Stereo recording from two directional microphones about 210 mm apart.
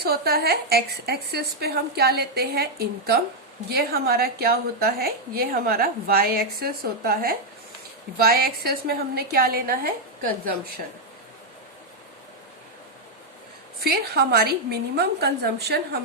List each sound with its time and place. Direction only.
0.0 s a woman's voice: 50° right (ahead or behind)
13.8 s a woman's voice: 50° right (ahead or behind)